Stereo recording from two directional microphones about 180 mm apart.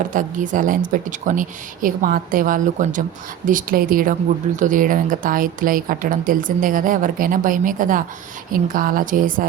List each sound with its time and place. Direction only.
0.0 s a woman's voice: 45° right (ahead or behind)